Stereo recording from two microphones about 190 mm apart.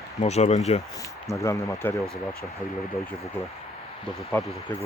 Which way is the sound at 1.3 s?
15° left (ahead or behind).